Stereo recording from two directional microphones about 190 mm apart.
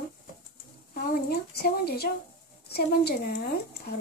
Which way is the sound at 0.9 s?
50° left (ahead or behind).